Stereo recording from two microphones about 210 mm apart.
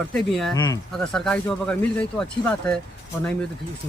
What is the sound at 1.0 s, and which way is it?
Speech, 5° left (ahead or behind).